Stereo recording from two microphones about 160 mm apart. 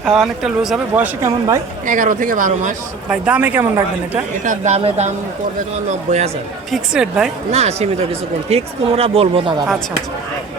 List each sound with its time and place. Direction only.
0.0 s speech: centre (ahead or behind)
1.9 s speech: 55° right (ahead or behind)
3.1 s speech: 10° right (ahead or behind)
4.4 s speech: 45° right (ahead or behind)
6.7 s speech: 5° right (ahead or behind)
7.5 s speech: 40° right (ahead or behind)